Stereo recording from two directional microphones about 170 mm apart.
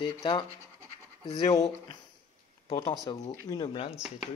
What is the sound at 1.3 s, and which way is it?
Speech, 20° left (ahead or behind).